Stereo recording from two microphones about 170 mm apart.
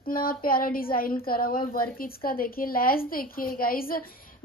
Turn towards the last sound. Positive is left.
turn(degrees=60)  # may be behind; listen again after turning